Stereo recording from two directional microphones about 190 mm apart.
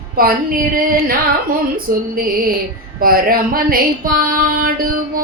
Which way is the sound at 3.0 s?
50° right (ahead or behind).